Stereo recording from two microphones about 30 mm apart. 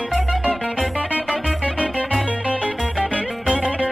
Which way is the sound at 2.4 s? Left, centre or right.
Right.